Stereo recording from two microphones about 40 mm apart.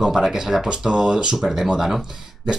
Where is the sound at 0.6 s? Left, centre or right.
Right.